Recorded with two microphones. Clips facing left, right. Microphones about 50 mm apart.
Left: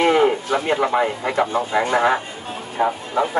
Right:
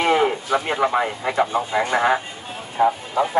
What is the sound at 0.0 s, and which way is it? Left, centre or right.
A man's voice, centre.